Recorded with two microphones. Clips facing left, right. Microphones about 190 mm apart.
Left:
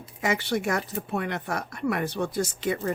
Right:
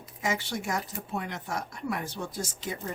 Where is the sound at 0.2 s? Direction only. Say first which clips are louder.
Left 5 dB; 65° left (ahead or behind).